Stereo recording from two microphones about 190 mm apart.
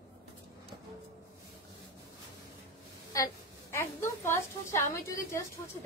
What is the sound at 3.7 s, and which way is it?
A woman's voice, 15° left (ahead or behind).